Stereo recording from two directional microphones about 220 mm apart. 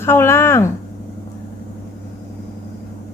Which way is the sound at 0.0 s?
10° left (ahead or behind).